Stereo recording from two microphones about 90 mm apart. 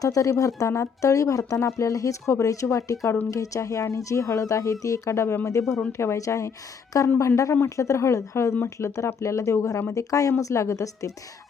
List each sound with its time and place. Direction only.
0.0 s speech: 40° left (ahead or behind)